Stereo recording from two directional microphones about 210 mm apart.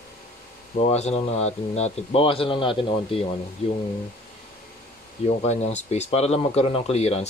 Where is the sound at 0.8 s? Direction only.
30° left (ahead or behind).